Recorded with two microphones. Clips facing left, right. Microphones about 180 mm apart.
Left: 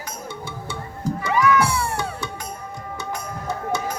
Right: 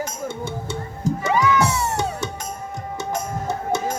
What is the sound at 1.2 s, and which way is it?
Music, 25° right (ahead or behind).